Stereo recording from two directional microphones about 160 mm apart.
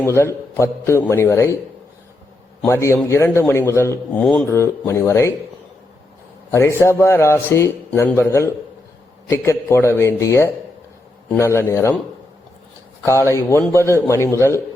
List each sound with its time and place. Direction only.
0.0 s a man's voice: 15° left (ahead or behind)
2.6 s a man's voice: 15° left (ahead or behind)
6.5 s a man's voice: 15° left (ahead or behind)
13.1 s a man's voice: 15° left (ahead or behind)